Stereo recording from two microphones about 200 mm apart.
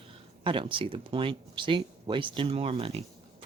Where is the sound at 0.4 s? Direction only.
25° right (ahead or behind).